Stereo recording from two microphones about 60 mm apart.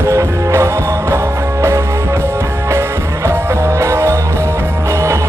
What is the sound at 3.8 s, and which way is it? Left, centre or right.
Music, right.